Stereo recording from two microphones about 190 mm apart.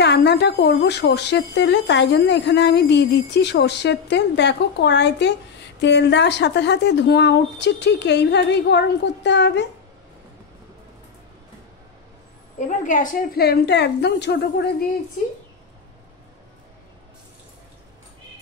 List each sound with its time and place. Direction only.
0.0 s a woman's voice: 65° left (ahead or behind)
12.5 s a woman's voice: 40° left (ahead or behind); by 14.9 s 60° left (ahead or behind)